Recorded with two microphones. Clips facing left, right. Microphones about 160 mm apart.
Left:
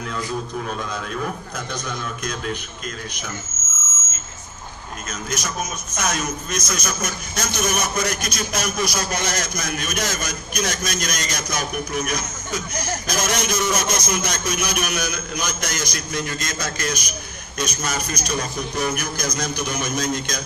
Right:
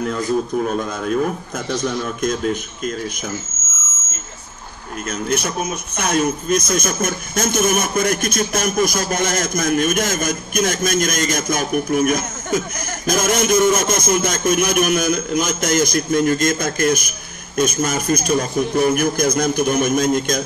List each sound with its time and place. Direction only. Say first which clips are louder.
0.0 s a man's voice: right 8 dB; 45° right (ahead or behind)
5.1 s a man's voice: right 6 dB; 60° right (ahead or behind)